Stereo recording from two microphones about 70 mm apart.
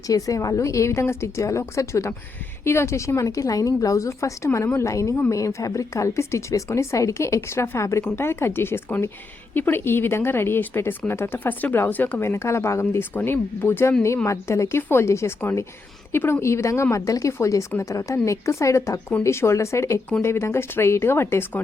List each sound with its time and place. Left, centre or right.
0.1 s speech: left
12.2 s speech: left
14.3 s speech: left